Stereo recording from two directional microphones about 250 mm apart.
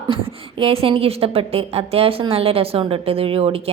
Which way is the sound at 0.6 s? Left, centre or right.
Right.